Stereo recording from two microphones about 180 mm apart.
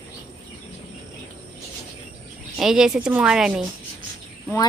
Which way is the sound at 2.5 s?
5° right (ahead or behind).